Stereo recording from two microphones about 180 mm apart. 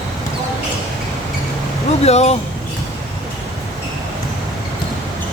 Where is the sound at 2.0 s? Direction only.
35° left (ahead or behind).